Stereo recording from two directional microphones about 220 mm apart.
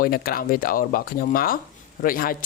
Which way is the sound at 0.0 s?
40° left (ahead or behind).